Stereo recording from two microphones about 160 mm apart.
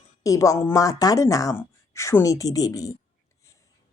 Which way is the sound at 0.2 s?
20° left (ahead or behind).